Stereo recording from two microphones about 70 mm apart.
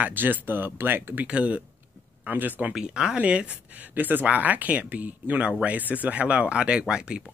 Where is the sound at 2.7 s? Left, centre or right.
Centre.